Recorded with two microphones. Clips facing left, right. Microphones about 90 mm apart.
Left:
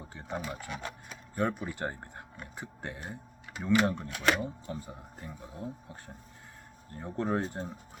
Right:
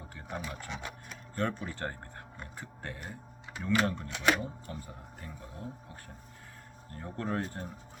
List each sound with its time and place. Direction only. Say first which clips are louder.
0.1 s speech: left 3 dB; 25° left (ahead or behind)
0.3 s speech: left 2 dB; 10° left (ahead or behind)
6.9 s speech: left 3 dB; 20° left (ahead or behind)